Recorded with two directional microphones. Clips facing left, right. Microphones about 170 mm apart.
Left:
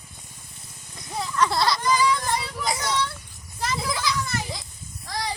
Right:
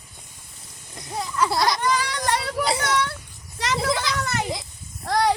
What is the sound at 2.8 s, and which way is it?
Children playing, 70° right (ahead or behind).